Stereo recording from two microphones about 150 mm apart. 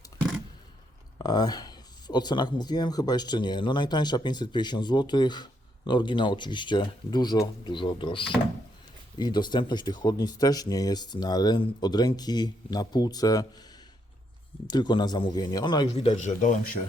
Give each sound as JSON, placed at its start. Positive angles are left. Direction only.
{"t": 1.2, "sound": "speech", "side_deg": 25}
{"t": 14.7, "sound": "speech", "side_deg": 30}
{"t": 16.0, "sound": "speech", "side_deg": 50}